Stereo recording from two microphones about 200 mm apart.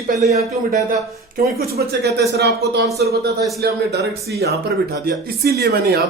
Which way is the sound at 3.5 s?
55° right (ahead or behind).